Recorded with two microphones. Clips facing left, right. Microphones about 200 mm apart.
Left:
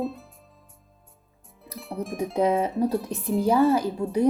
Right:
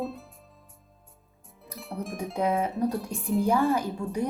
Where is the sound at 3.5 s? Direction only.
35° left (ahead or behind).